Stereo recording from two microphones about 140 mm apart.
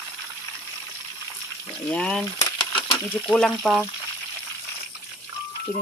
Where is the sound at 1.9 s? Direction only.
5° left (ahead or behind).